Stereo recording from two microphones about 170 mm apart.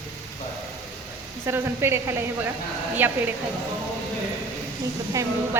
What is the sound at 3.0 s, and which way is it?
Speech, 10° right (ahead or behind).